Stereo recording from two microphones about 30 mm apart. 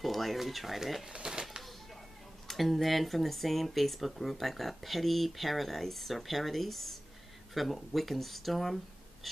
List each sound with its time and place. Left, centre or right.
0.0 s speech: centre
1.2 s a sound: right
2.4 s speech: centre